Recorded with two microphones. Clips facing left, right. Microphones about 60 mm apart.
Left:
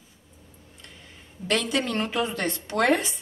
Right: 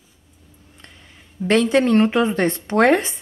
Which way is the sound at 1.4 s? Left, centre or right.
Right.